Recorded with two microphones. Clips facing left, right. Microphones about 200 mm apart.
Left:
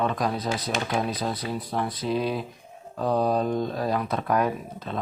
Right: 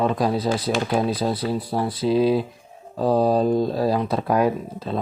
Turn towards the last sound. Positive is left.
turn(degrees=-30)  # may be behind; listen again after turning